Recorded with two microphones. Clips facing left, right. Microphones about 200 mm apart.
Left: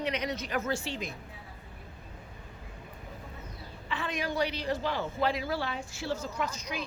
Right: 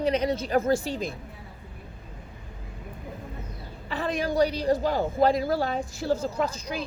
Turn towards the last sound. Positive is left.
turn(degrees=-30)  # may be behind; listen again after turning